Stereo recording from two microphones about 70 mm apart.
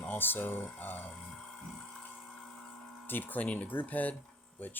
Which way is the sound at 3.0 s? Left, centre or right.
Left.